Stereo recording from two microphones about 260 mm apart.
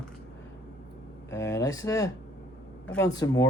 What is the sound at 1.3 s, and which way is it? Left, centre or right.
Speech, centre.